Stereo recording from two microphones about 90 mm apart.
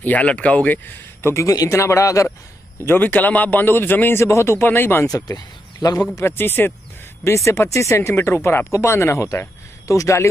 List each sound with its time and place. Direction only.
0.0 s speech: 15° left (ahead or behind)
1.3 s speech: 35° left (ahead or behind)
2.8 s a man's voice: 20° left (ahead or behind)
5.0 s speech: 45° left (ahead or behind)
6.1 s a man's voice: 25° left (ahead or behind)